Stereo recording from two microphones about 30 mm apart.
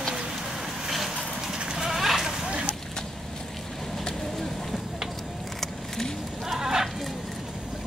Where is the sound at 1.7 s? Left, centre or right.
Centre.